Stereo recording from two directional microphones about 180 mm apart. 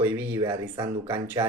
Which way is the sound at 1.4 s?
25° right (ahead or behind).